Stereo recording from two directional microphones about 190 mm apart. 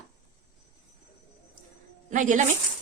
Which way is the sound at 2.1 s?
40° right (ahead or behind).